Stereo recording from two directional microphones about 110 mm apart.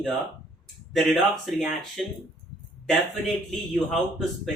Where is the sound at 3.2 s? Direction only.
5° left (ahead or behind).